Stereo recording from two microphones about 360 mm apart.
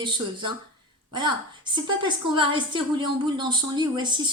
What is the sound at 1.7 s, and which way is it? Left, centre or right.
Speech, centre.